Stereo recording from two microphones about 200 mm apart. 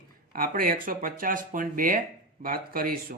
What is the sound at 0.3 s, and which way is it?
Speech, 45° right (ahead or behind).